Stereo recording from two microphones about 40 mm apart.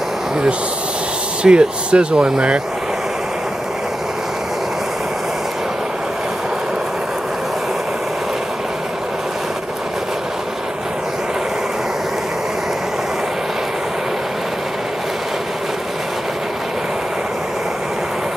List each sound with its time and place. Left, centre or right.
1.4 s speech: right